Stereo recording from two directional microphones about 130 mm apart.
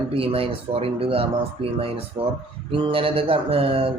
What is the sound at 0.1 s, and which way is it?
Speech, 45° right (ahead or behind).